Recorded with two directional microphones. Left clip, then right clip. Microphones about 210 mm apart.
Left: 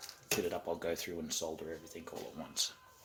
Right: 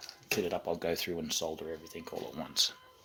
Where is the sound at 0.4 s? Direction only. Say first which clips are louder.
Right 4 dB; 40° right (ahead or behind).